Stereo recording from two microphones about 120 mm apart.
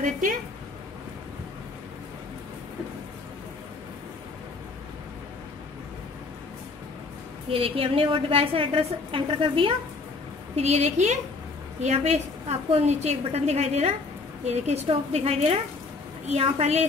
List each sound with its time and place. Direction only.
0.0 s a woman's voice: 90° right
7.4 s a woman's voice: 50° right (ahead or behind)
10.5 s a woman's voice: 65° right (ahead or behind)